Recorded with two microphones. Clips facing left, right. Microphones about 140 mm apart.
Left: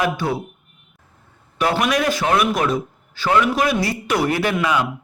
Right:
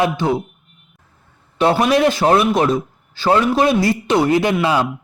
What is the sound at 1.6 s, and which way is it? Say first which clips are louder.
A man's voice: right 5 dB; 25° right (ahead or behind).